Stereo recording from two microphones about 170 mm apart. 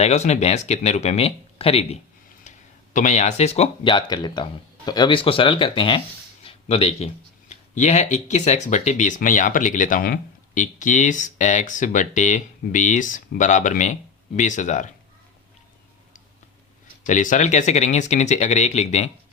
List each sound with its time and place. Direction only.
0.0 s speech: 40° left (ahead or behind)
2.9 s speech: 45° left (ahead or behind)
3.9 s speech: 25° left (ahead or behind); by 14.9 s 45° left (ahead or behind)
17.1 s speech: 50° left (ahead or behind)